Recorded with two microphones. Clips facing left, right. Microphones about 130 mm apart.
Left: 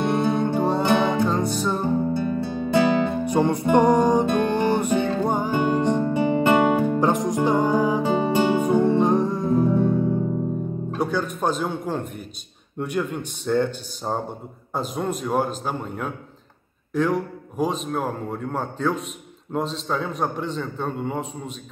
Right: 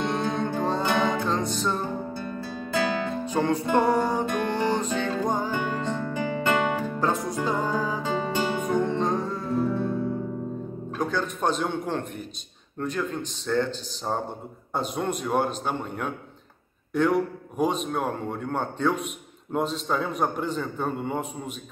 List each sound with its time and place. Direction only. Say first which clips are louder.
0.0 s music: left 5 dB; 10° left (ahead or behind)
2.6 s music: left 7 dB; 20° left (ahead or behind)
11.0 s a man's voice: left 2 dB; 10° left (ahead or behind)
14.7 s a man's voice: left 2 dB; centre (ahead or behind)